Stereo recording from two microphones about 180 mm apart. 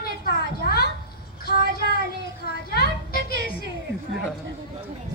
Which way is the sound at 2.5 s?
55° left (ahead or behind).